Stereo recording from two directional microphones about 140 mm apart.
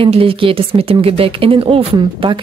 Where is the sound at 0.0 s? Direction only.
40° right (ahead or behind).